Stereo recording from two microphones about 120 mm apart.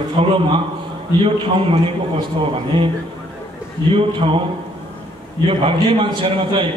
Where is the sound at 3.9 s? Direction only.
50° right (ahead or behind).